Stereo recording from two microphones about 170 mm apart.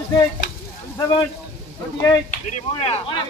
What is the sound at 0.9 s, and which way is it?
Speech, 20° left (ahead or behind).